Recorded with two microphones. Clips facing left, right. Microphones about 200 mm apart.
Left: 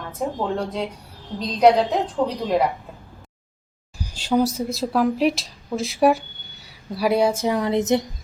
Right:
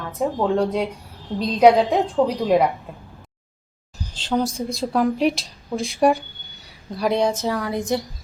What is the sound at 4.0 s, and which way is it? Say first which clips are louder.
A woman's voice: left 2 dB; 10° left (ahead or behind).